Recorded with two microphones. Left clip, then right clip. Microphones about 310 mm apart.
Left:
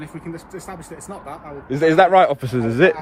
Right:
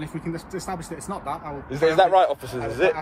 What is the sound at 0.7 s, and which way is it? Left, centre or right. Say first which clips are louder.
Speech: right 4 dB; centre.